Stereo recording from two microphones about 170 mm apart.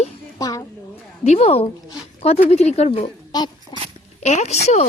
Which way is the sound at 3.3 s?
25° left (ahead or behind).